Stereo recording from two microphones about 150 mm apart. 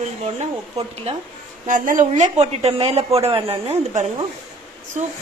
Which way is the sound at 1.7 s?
60° right (ahead or behind).